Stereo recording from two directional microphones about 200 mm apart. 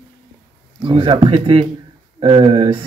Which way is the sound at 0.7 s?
25° right (ahead or behind).